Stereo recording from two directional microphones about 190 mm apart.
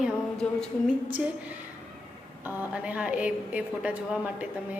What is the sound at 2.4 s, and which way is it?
A woman's voice, 5° right (ahead or behind).